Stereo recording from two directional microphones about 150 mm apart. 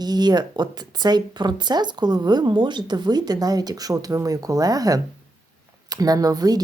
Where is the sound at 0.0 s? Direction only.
25° right (ahead or behind).